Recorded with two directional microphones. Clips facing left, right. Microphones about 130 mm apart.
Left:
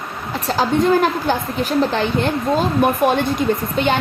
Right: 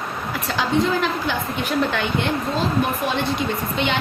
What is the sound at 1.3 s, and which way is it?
Speech, 35° left (ahead or behind).